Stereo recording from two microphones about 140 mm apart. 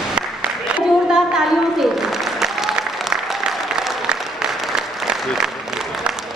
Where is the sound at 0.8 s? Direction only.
5° right (ahead or behind).